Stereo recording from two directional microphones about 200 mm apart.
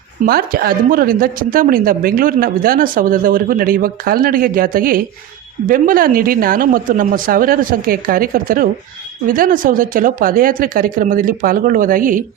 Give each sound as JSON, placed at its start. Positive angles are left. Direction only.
{"t": 0.3, "sound": "a woman's voice", "side_deg": -50}